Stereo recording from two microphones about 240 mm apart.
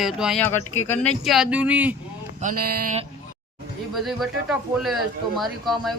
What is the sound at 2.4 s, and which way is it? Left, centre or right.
Speech, right.